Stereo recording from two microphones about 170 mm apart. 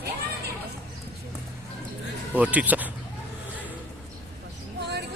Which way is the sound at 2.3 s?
10° right (ahead or behind).